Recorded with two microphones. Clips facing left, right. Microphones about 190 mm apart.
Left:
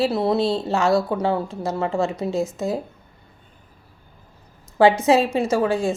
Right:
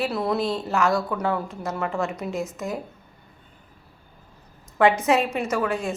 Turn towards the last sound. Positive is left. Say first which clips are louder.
# left 5 dB
turn(degrees=30)  # may be behind; listen again after turning